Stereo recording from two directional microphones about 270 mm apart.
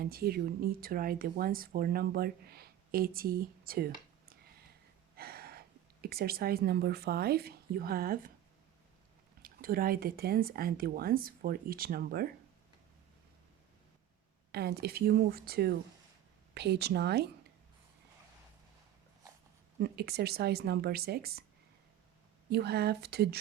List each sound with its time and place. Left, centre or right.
0.0 s speech: right
9.4 s speech: right
14.5 s speech: right
19.8 s speech: right
22.4 s speech: right